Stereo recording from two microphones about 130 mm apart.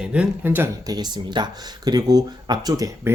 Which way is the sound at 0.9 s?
35° right (ahead or behind).